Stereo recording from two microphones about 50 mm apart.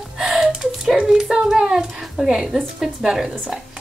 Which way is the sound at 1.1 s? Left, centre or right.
Centre.